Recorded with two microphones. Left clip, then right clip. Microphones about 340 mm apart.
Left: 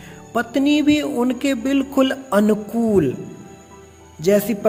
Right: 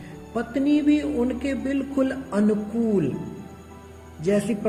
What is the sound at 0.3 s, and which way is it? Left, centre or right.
Speech, left.